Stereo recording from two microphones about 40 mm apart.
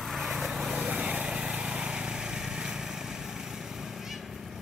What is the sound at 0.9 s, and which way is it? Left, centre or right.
Vehicle, right.